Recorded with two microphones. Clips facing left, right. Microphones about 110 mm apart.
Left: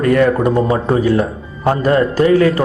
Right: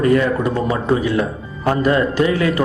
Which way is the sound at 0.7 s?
40° left (ahead or behind).